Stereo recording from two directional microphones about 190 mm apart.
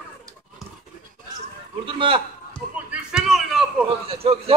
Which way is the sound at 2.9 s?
5° right (ahead or behind).